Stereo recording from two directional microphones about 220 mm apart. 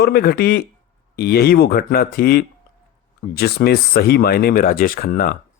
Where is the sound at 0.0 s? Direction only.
45° left (ahead or behind).